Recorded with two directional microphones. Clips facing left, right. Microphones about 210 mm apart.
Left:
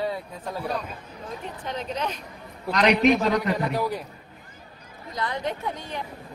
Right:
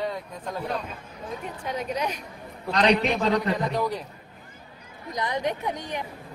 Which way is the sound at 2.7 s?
30° right (ahead or behind).